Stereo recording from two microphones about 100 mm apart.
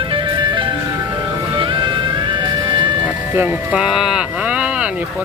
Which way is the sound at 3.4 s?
10° right (ahead or behind).